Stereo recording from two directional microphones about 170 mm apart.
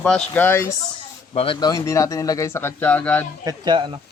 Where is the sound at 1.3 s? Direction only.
30° left (ahead or behind); by 3.3 s 10° left (ahead or behind).